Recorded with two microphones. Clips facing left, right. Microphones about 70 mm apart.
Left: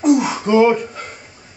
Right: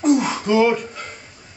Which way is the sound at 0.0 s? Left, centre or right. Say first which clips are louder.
Left 2 dB; centre.